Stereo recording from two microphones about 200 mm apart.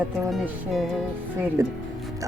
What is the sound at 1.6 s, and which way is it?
Speech, 15° right (ahead or behind).